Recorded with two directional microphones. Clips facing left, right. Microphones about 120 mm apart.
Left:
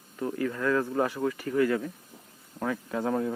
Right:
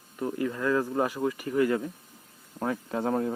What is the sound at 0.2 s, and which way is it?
Speech, 15° right (ahead or behind).